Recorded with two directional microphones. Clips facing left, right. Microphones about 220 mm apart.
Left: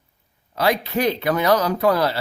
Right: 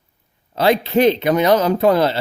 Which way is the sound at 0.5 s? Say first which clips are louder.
Right 5 dB; 25° right (ahead or behind).